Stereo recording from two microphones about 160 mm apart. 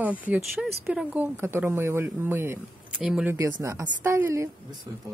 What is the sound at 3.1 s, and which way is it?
Speech, 5° right (ahead or behind).